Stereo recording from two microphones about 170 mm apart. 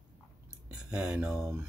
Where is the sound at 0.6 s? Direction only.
5° right (ahead or behind).